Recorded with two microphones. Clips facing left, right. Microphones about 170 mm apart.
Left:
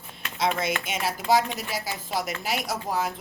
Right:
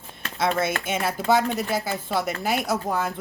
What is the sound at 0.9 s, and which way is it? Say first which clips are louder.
Speech: right 1 dB; 55° right (ahead or behind).